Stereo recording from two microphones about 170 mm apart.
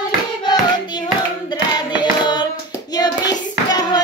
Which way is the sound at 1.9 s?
25° left (ahead or behind).